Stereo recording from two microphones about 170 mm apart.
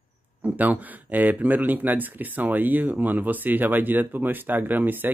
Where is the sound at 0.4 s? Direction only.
10° right (ahead or behind).